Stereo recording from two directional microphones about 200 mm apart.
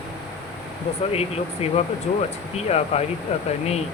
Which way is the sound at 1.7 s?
30° left (ahead or behind).